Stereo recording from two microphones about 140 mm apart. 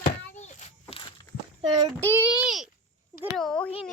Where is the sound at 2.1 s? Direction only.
10° right (ahead or behind); by 3.9 s 5° left (ahead or behind).